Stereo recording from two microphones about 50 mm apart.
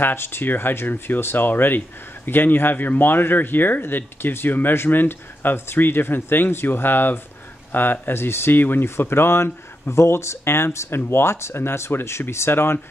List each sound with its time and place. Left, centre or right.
0.0 s speech: left